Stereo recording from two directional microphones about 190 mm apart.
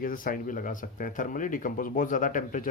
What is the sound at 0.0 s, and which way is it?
Speech, 45° left (ahead or behind).